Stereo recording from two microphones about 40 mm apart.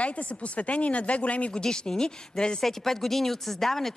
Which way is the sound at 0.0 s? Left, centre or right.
Left.